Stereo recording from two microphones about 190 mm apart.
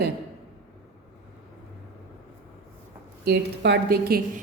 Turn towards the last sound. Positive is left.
turn(degrees=-55)  # may be behind; listen again after turning